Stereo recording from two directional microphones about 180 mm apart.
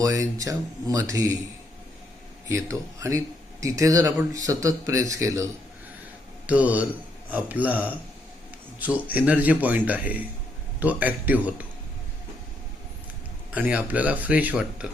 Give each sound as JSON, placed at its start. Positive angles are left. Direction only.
{"t": 0.0, "sound": "speech", "side_deg": -20}
{"t": 2.5, "sound": "speech", "side_deg": -15}
{"t": 6.5, "sound": "speech", "side_deg": -10}
{"t": 8.8, "sound": "speech", "side_deg": -10}
{"t": 13.5, "sound": "speech", "side_deg": -5}